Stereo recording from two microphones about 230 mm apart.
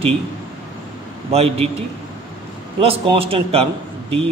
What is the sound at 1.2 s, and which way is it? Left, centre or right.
Speech, right.